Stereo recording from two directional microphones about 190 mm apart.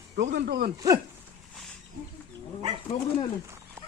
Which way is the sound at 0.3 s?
55° right (ahead or behind).